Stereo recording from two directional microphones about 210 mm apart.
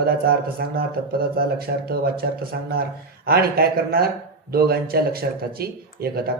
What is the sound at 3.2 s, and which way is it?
Speech, 45° right (ahead or behind).